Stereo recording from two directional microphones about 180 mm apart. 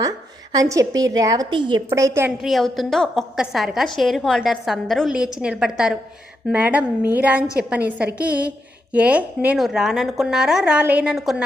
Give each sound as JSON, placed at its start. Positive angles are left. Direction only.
{"t": 0.5, "sound": "a woman's voice", "side_deg": -20}
{"t": 1.9, "sound": "a woman's voice", "side_deg": -15}
{"t": 2.4, "sound": "a woman's voice", "side_deg": 0}